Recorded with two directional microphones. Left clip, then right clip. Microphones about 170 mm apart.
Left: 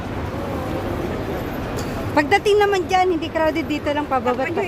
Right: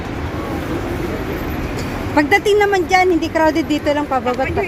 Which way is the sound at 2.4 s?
10° right (ahead or behind).